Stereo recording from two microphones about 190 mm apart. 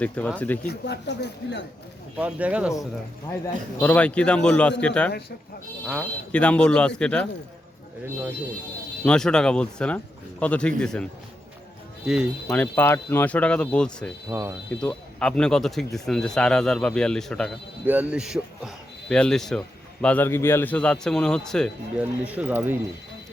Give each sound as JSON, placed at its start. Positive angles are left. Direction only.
{"t": 0.3, "sound": "speech", "side_deg": 10}
{"t": 0.7, "sound": "speech", "side_deg": 60}
{"t": 2.1, "sound": "speech", "side_deg": -5}
{"t": 3.4, "sound": "speech", "side_deg": 10}
{"t": 6.3, "sound": "speech", "side_deg": 5}
{"t": 9.0, "sound": "speech", "side_deg": 5}
{"t": 12.0, "sound": "speech", "side_deg": 0}
{"t": 12.5, "sound": "speech", "side_deg": 10}
{"t": 14.3, "sound": "speech", "side_deg": -15}
{"t": 14.7, "sound": "speech", "side_deg": 5}
{"t": 17.8, "sound": "speech", "side_deg": -10}
{"t": 21.9, "sound": "speech", "side_deg": -5}